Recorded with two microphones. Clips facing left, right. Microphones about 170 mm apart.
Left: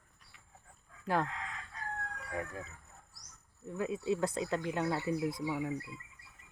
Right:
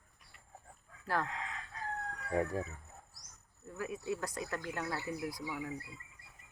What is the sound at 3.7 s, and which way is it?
Speech, 25° left (ahead or behind).